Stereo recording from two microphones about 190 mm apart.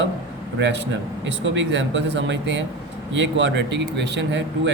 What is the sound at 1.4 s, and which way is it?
Speech, 75° right (ahead or behind).